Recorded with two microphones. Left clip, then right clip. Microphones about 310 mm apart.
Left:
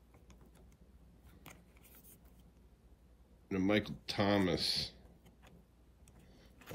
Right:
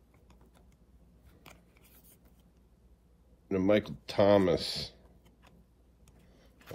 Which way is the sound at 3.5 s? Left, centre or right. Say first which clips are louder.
Right 7 dB; centre.